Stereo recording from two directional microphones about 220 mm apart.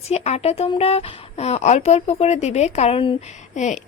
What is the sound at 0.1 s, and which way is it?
Speech, 30° left (ahead or behind).